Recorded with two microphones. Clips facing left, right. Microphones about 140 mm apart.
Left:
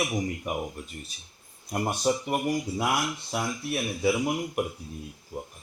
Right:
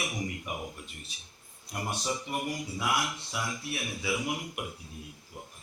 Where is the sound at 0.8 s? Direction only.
40° left (ahead or behind).